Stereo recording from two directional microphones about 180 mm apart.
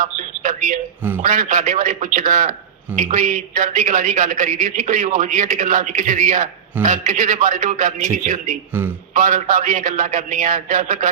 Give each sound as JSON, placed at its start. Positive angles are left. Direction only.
{"t": 0.0, "sound": "a sound", "side_deg": -45}
{"t": 1.2, "sound": "a man's voice", "side_deg": -45}
{"t": 8.7, "sound": "a man's voice", "side_deg": -10}
{"t": 9.1, "sound": "a man's voice", "side_deg": -45}